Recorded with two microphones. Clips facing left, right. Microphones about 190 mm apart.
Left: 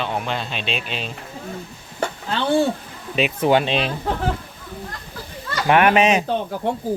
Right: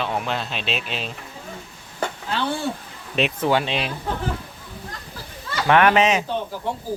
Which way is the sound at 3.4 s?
20° left (ahead or behind).